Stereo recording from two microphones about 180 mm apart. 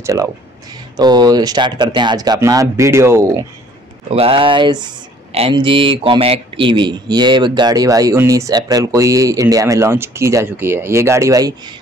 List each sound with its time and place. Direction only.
0.0 s speech: 20° right (ahead or behind)
4.1 s speech: 30° right (ahead or behind)